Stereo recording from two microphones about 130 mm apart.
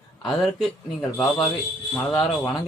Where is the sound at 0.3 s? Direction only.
Centre (ahead or behind).